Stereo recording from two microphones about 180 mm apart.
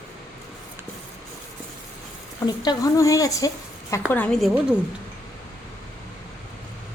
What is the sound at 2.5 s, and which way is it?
A woman's voice, 20° left (ahead or behind).